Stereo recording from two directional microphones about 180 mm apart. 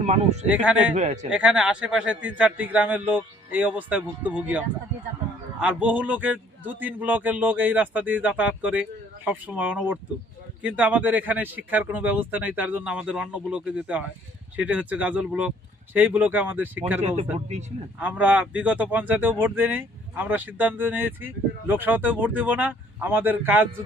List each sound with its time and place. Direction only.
0.0 s speech: 40° right (ahead or behind)
0.4 s speech: 5° right (ahead or behind)
0.9 s speech: 40° right (ahead or behind)
1.3 s speech: 5° right (ahead or behind)
17.5 s speech: 40° right (ahead or behind)
18.0 s speech: 10° right (ahead or behind)